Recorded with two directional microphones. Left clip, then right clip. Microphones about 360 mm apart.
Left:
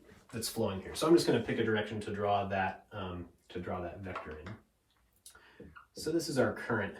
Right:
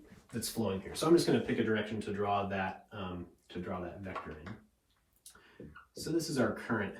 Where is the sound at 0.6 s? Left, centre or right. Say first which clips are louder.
Left 1 dB; centre.